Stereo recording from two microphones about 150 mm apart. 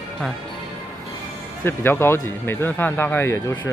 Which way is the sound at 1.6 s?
15° left (ahead or behind).